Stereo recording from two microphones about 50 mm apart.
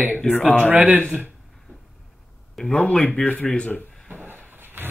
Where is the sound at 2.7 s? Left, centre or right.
Left.